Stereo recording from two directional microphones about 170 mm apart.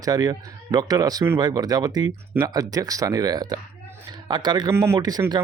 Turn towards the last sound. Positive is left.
turn(degrees=-20)  # may be behind; listen again after turning